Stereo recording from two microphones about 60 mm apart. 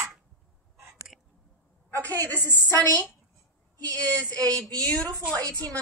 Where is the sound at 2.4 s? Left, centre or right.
Left.